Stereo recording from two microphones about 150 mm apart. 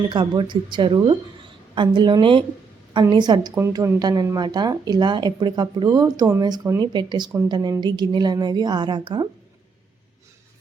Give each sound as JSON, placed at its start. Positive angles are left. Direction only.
{"t": 0.1, "sound": "speech", "side_deg": -30}